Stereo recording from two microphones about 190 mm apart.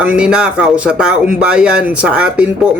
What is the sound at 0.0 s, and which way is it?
Speech, 5° right (ahead or behind).